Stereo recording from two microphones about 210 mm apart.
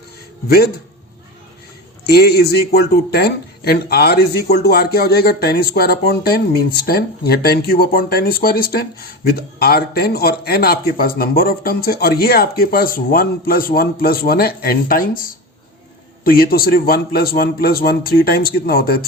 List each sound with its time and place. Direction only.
0.4 s speech: 50° left (ahead or behind)
2.0 s speech: 50° left (ahead or behind)